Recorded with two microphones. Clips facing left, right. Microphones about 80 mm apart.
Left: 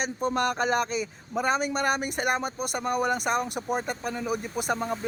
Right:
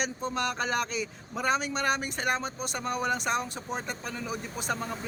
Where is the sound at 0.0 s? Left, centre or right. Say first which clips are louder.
Left 4 dB; left.